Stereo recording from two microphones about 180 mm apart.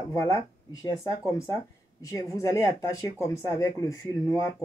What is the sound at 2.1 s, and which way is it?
Speech, 15° left (ahead or behind).